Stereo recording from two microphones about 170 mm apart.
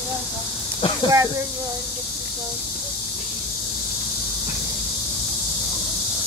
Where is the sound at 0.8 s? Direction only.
35° left (ahead or behind).